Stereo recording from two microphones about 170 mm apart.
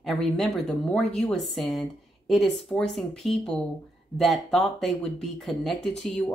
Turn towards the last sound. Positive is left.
turn(degrees=0)  # may be behind; listen again after turning